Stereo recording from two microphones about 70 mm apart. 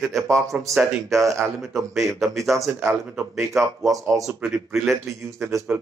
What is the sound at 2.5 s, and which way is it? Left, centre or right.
Speech, right.